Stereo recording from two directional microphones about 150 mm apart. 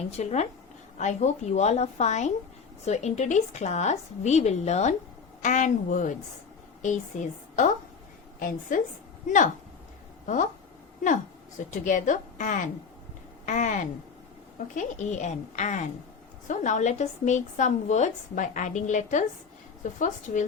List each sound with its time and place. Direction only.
0.2 s a woman's voice: 45° left (ahead or behind)
7.5 s a woman's voice: 60° left (ahead or behind)
10.2 s a woman's voice: 55° left (ahead or behind)